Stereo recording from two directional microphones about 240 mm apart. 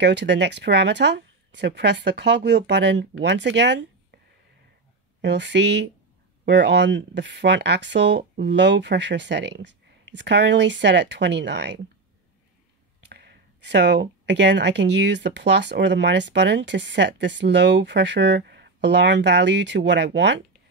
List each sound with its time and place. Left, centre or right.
0.0 s speech: right
5.2 s speech: right
13.0 s speech: right